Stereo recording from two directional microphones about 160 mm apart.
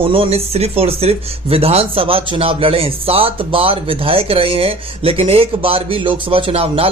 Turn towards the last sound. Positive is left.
turn(degrees=-35)  # may be behind; listen again after turning